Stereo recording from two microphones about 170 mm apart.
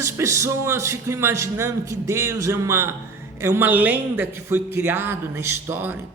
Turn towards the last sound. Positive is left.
turn(degrees=-10)  # may be behind; listen again after turning